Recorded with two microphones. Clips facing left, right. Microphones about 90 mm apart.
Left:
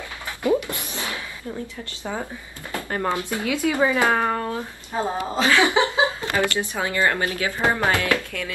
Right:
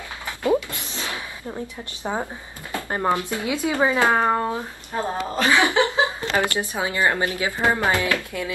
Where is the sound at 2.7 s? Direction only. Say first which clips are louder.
Right 2 dB; 20° right (ahead or behind).